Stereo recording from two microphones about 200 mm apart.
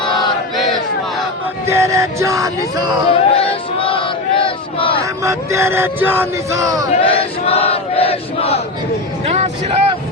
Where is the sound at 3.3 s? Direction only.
25° left (ahead or behind).